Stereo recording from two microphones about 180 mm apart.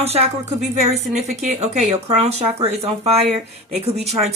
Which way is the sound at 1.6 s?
35° right (ahead or behind).